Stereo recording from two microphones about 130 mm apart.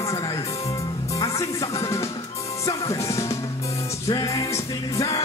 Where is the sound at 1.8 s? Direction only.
25° left (ahead or behind).